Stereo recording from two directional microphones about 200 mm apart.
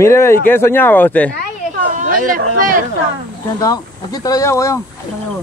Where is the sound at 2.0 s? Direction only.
45° right (ahead or behind).